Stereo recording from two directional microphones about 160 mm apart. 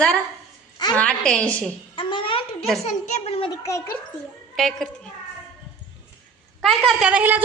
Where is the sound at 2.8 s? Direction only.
45° left (ahead or behind).